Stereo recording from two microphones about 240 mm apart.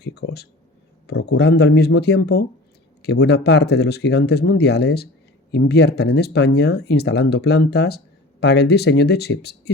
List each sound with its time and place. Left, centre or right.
0.0 s speech: left